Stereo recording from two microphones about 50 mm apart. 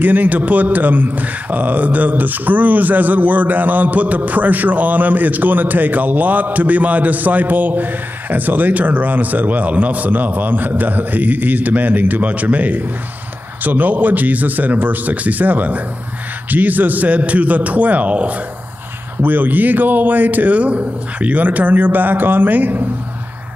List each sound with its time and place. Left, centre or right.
0.0 s a man's voice: right
19.2 s a man's voice: right